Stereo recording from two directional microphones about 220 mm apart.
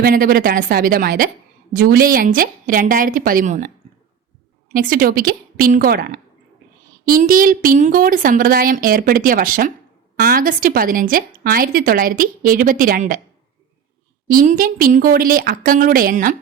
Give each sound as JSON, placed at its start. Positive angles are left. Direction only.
{"t": 0.0, "sound": "speech", "side_deg": -40}
{"t": 4.7, "sound": "speech", "side_deg": -40}
{"t": 14.3, "sound": "speech", "side_deg": -40}